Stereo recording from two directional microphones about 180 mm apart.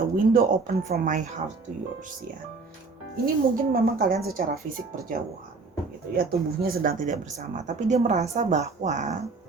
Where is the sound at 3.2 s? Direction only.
55° right (ahead or behind).